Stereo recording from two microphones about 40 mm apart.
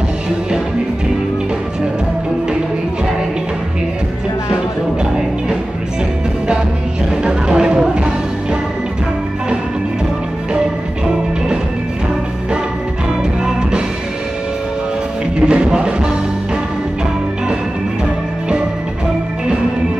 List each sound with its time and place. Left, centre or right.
7.2 s music: centre
13.4 s music: right
15.3 s music: right